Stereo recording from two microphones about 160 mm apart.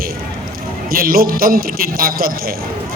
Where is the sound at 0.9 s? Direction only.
65° right (ahead or behind).